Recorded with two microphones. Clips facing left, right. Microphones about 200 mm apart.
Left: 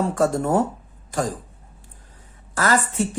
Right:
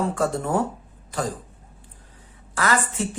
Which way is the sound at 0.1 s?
45° left (ahead or behind).